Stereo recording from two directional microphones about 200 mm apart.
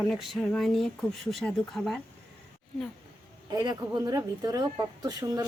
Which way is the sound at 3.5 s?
15° right (ahead or behind).